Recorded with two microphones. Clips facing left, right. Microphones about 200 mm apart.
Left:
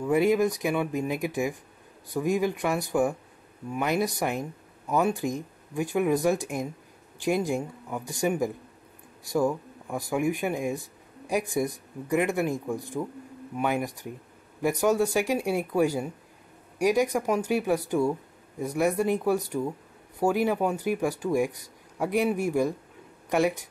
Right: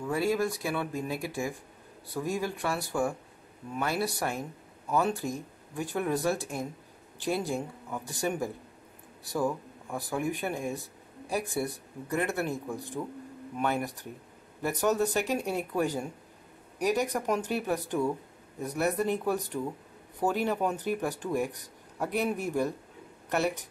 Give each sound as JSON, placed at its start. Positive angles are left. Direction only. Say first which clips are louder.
{"t": 0.0, "sound": "speech", "louder": "left 6 dB", "side_deg": 20}